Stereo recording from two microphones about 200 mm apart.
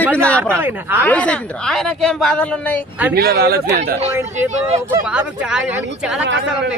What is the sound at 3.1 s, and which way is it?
Speech, 50° right (ahead or behind).